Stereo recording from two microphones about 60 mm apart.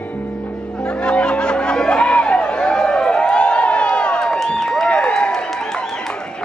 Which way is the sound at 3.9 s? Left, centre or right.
Centre.